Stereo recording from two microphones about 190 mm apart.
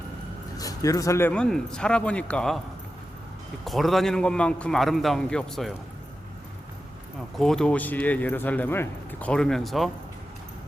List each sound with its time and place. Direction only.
0.5 s speech: 20° left (ahead or behind)
3.6 s a man's voice: centre (ahead or behind)
7.3 s speech: centre (ahead or behind)